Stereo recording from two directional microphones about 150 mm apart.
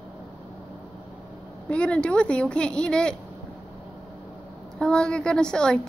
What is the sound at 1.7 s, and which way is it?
A woman's voice, 5° left (ahead or behind).